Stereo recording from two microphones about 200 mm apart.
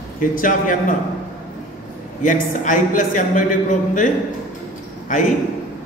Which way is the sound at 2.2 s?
40° left (ahead or behind).